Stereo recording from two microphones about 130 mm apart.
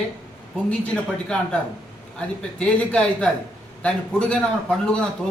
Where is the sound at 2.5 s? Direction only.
10° left (ahead or behind).